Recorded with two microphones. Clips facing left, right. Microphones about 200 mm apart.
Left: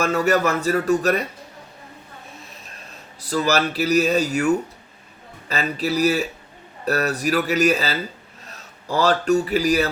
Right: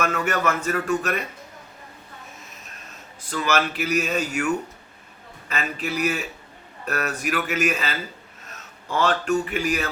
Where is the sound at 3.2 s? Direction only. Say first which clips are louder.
Left 3 dB; 35° left (ahead or behind).